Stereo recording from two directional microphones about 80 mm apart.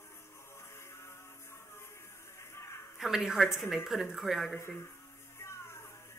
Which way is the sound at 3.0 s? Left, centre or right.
Centre.